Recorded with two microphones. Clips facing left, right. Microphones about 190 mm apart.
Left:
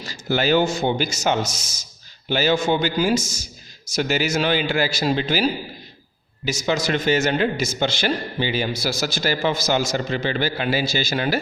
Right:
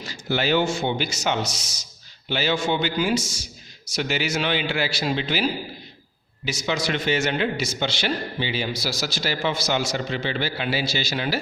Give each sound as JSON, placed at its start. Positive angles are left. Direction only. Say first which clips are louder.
{"t": 0.0, "sound": "a man's voice", "louder": "left 3 dB", "side_deg": 40}